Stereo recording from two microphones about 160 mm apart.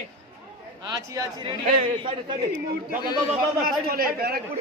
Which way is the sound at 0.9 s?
20° right (ahead or behind).